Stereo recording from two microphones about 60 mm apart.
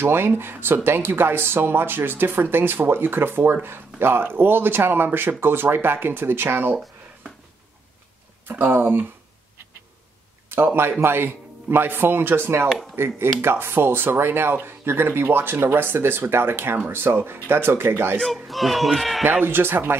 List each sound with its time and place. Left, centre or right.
0.0 s speech: right
8.5 s speech: right
10.5 s speech: right
18.2 s speech: centre
19.4 s speech: right